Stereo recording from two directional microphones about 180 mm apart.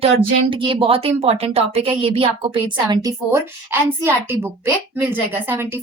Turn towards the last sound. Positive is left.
turn(degrees=-15)  # may be behind; listen again after turning